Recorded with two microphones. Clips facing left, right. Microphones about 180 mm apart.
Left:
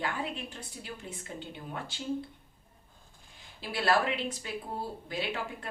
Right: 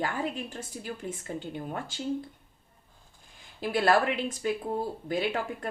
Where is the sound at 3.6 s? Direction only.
50° right (ahead or behind).